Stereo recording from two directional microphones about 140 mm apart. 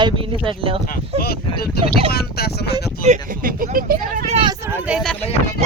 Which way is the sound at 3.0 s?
70° right (ahead or behind).